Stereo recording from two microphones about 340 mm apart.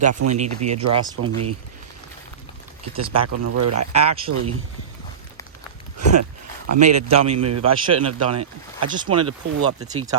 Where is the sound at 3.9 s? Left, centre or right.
Centre.